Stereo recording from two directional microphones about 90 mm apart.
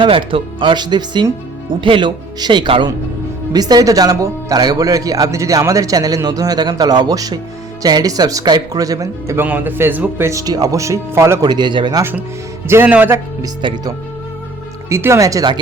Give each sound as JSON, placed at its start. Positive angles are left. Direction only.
{"t": 0.0, "sound": "speech", "side_deg": -70}
{"t": 3.5, "sound": "speech", "side_deg": -50}
{"t": 9.4, "sound": "a man's voice", "side_deg": -20}
{"t": 10.2, "sound": "speech", "side_deg": -40}
{"t": 11.3, "sound": "speech", "side_deg": -55}
{"t": 12.6, "sound": "a man's voice", "side_deg": -25}
{"t": 14.8, "sound": "speech", "side_deg": -30}